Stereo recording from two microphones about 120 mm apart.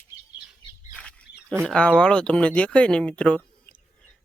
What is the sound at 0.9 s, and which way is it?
Bird, 10° left (ahead or behind).